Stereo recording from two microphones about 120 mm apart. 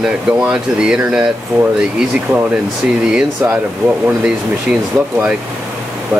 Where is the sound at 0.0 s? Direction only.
10° right (ahead or behind).